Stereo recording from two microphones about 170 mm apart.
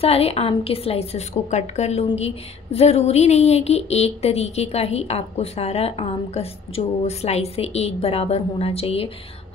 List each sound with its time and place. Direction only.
0.0 s speech: 35° left (ahead or behind)